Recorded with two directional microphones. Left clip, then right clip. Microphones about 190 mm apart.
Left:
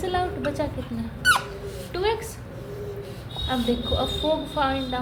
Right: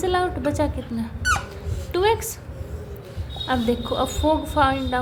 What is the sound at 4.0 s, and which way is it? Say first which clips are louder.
A woman's voice: right 3 dB; 50° right (ahead or behind).